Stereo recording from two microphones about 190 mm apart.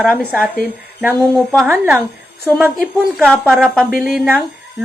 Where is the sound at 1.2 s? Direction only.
5° left (ahead or behind).